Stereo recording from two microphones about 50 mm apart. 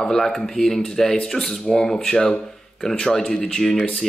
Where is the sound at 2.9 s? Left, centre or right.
Centre.